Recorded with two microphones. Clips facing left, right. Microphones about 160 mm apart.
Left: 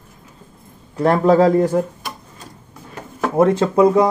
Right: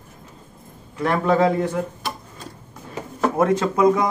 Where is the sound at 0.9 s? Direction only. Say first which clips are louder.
Left 6 dB; 35° left (ahead or behind).